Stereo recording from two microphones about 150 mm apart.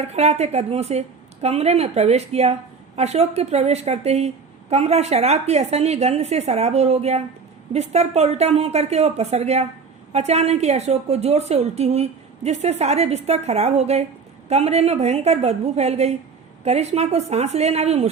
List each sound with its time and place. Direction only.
0.0 s a woman's voice: 45° right (ahead or behind)